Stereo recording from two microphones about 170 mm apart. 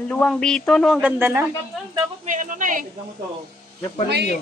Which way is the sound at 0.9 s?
15° right (ahead or behind).